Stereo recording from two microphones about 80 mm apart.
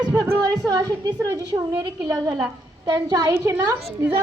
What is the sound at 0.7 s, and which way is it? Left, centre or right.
Speech, right.